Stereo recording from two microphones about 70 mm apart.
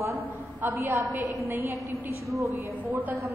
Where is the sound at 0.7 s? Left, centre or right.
Right.